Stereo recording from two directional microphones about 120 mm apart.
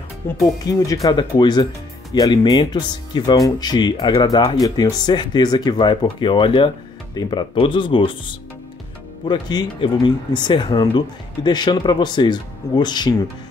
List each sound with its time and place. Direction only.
0.4 s speech: 30° left (ahead or behind)